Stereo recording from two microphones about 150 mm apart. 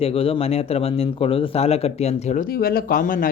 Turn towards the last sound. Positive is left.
turn(degrees=70)  # may be behind; listen again after turning